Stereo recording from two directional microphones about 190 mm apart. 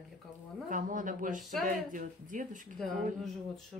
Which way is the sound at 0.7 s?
45° right (ahead or behind).